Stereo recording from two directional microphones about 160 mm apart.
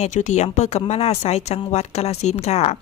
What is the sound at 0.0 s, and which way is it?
A woman's voice, 50° left (ahead or behind).